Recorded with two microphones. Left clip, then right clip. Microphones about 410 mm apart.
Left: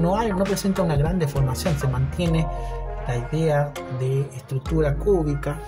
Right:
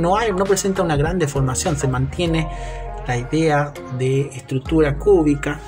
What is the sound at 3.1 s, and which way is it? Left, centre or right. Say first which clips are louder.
Speech: right 5 dB; left.